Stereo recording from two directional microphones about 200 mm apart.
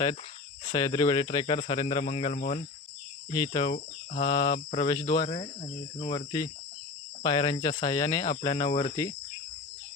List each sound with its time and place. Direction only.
0.6 s speech: 20° left (ahead or behind)
5.2 s speech: 30° left (ahead or behind)